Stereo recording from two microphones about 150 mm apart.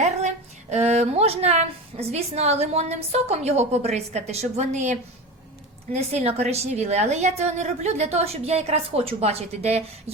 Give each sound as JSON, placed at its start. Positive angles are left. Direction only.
{"t": 0.0, "sound": "a woman's voice", "side_deg": -50}